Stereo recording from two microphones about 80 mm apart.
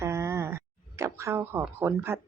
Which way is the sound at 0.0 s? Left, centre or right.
Right.